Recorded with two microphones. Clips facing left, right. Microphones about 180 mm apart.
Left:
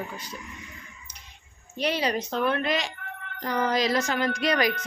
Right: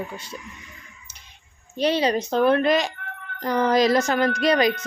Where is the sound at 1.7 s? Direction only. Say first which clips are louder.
Right 5 dB; 30° right (ahead or behind).